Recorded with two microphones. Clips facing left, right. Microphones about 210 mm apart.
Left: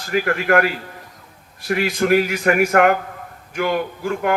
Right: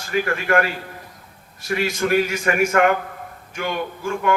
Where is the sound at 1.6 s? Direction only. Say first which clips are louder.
Left 3 dB; 60° left (ahead or behind).